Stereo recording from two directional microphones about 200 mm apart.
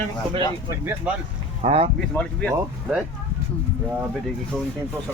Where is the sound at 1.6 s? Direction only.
30° right (ahead or behind).